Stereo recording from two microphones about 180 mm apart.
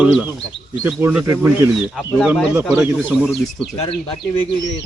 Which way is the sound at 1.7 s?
Centre (ahead or behind).